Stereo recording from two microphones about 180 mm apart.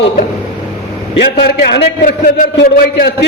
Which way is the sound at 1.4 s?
65° left (ahead or behind).